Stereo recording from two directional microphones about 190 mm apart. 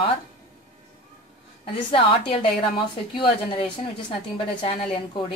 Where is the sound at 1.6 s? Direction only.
30° left (ahead or behind).